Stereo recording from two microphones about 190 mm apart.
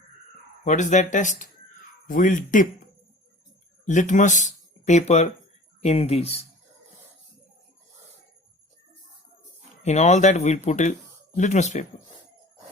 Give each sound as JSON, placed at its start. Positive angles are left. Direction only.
{"t": 0.6, "sound": "speech", "side_deg": 40}
{"t": 3.8, "sound": "speech", "side_deg": 40}
{"t": 9.8, "sound": "speech", "side_deg": 35}